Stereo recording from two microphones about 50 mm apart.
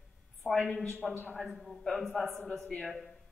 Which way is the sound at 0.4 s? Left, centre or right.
Left.